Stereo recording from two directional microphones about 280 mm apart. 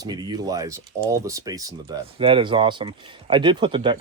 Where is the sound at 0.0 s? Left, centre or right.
Centre.